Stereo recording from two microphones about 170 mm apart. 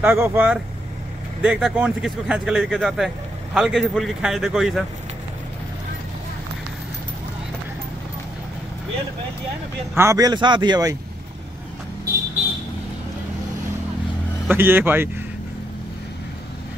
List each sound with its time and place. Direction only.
0.0 s speech: 15° right (ahead or behind)
9.9 s speech: 20° right (ahead or behind)
14.5 s speech: 15° right (ahead or behind)